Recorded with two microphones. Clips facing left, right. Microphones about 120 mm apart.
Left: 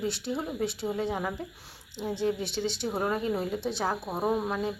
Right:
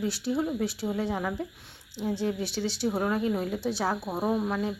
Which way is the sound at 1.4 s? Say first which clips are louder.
Right 4 dB; centre (ahead or behind).